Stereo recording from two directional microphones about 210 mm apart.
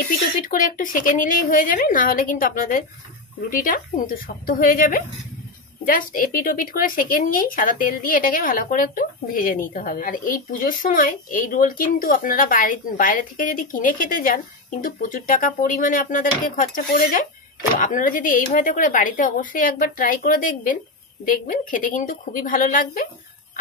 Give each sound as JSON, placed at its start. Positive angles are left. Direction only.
{"t": 0.5, "sound": "speech", "side_deg": 40}